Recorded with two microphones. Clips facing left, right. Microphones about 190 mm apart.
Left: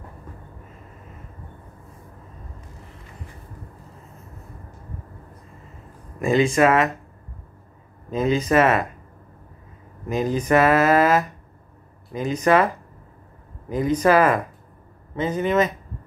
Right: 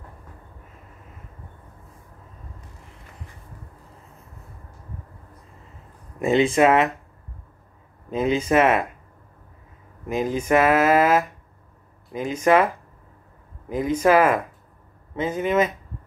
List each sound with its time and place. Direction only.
6.2 s speech: 20° right (ahead or behind)
8.1 s speech: 10° right (ahead or behind)
10.0 s speech: 5° right (ahead or behind)
13.7 s speech: 5° right (ahead or behind)